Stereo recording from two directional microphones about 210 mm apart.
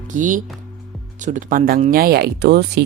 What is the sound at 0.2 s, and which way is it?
Speech, 40° right (ahead or behind).